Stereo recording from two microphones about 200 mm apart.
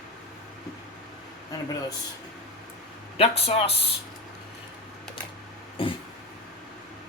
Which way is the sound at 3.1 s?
30° left (ahead or behind).